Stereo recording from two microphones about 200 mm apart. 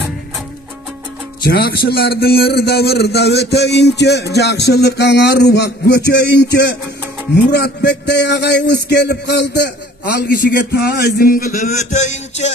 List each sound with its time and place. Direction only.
1.4 s a man's voice: 50° left (ahead or behind)